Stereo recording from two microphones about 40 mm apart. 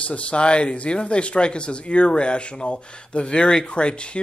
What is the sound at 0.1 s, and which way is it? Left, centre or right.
Speech, left.